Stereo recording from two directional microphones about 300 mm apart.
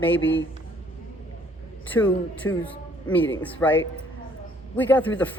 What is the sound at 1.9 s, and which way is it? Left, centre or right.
A man's voice, centre.